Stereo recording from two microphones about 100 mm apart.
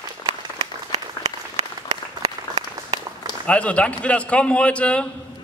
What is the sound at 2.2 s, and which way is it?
Applause, 90° right.